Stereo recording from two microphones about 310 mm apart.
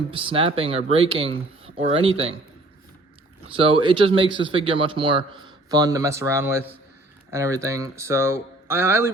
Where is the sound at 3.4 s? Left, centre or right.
Centre.